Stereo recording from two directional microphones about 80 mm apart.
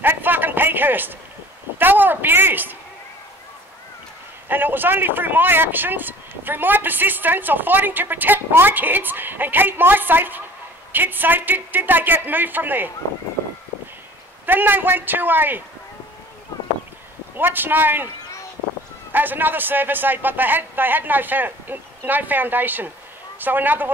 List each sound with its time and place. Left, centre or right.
0.0 s a sound: right
1.8 s speech: right
4.5 s speech: right
14.4 s speech: right
17.4 s speech: right
19.1 s speech: right